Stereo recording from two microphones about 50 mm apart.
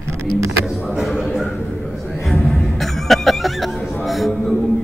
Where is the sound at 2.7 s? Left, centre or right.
Centre.